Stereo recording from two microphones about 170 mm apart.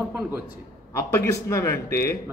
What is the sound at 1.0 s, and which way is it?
A man's voice, 15° left (ahead or behind).